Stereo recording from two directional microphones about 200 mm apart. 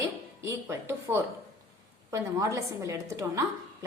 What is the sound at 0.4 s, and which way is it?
A woman's voice, 10° right (ahead or behind).